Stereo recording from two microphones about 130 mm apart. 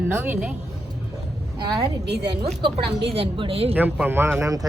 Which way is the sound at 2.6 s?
45° right (ahead or behind).